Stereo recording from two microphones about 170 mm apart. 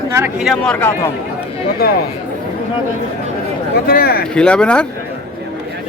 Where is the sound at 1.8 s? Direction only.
65° left (ahead or behind).